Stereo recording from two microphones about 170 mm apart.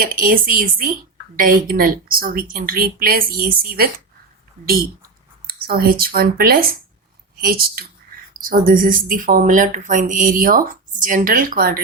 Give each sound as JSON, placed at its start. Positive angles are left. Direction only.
{"t": 0.0, "sound": "a woman's voice", "side_deg": -55}